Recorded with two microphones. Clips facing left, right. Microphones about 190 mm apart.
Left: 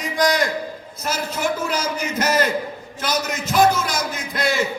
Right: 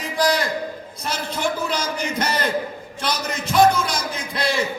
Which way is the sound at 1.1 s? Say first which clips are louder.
Left 1 dB; 5° left (ahead or behind).